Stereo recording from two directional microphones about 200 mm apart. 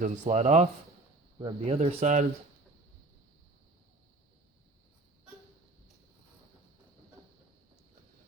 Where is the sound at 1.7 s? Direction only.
35° right (ahead or behind).